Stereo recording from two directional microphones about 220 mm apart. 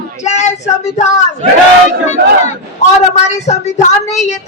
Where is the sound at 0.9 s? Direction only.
30° left (ahead or behind).